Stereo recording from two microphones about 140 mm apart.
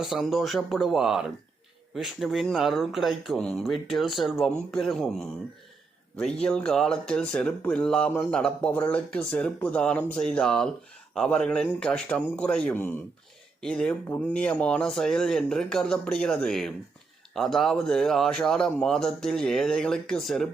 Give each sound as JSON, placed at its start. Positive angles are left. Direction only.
{"t": 0.0, "sound": "speech", "side_deg": 0}